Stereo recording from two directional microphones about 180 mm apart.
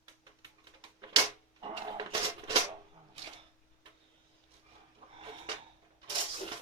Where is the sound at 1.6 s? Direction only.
25° right (ahead or behind).